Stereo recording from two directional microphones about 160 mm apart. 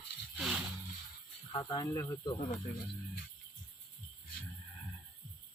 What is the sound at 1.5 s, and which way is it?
Cricket, 25° left (ahead or behind).